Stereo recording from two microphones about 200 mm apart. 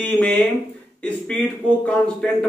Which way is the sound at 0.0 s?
5° left (ahead or behind).